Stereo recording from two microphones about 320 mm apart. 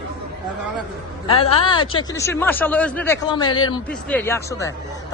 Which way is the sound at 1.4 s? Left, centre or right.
Centre.